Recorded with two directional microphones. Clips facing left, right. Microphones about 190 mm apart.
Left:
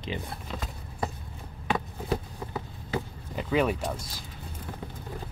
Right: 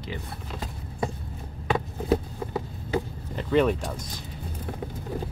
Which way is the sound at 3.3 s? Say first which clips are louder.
Right 4 dB; 5° left (ahead or behind).